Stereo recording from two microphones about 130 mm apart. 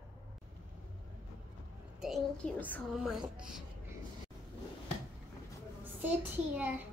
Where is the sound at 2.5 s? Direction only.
10° left (ahead or behind).